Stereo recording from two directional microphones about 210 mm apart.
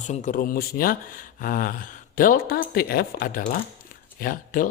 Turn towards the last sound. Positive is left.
turn(degrees=40)  # may be behind; listen again after turning